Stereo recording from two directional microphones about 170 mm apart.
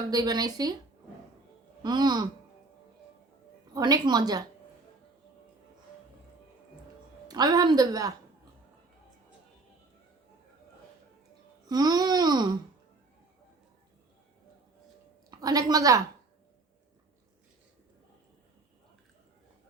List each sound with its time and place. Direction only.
0.1 s a woman's voice: 25° right (ahead or behind)
1.8 s a woman's voice: 25° right (ahead or behind)
3.8 s a woman's voice: 25° right (ahead or behind)
7.3 s a woman's voice: 25° right (ahead or behind)
11.7 s a woman's voice: 25° right (ahead or behind)
15.3 s a woman's voice: 20° right (ahead or behind)